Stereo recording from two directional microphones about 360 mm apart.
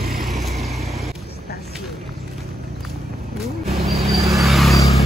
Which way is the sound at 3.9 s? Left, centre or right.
Centre.